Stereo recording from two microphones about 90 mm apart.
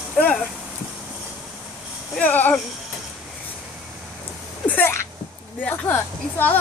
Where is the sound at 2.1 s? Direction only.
20° left (ahead or behind).